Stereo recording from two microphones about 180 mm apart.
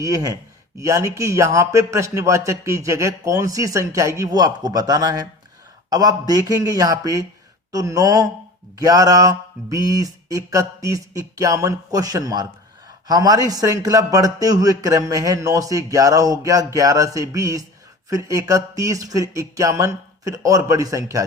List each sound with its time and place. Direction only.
0.0 s a man's voice: 20° right (ahead or behind)